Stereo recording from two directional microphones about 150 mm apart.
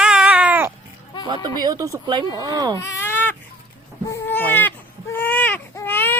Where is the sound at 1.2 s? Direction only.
30° right (ahead or behind).